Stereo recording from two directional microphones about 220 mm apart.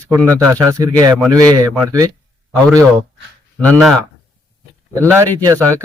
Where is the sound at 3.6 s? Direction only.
5° left (ahead or behind).